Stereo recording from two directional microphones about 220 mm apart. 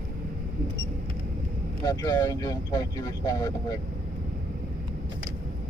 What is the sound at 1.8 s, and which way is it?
Speech, 15° left (ahead or behind).